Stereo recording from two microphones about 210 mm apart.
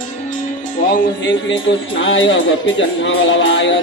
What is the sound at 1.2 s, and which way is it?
Music, 60° left (ahead or behind).